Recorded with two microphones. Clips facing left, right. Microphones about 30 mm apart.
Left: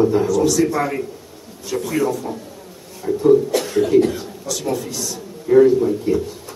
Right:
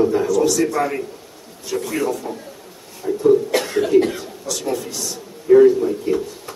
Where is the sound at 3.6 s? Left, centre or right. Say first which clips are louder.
Left 1 dB; right.